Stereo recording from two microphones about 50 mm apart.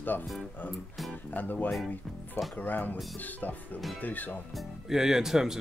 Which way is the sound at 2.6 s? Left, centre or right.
Left.